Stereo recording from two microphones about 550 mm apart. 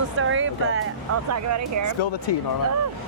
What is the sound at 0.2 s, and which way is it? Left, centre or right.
Speech, right.